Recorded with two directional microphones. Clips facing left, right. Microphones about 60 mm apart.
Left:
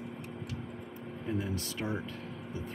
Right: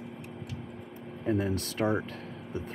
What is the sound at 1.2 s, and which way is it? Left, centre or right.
Speech, right.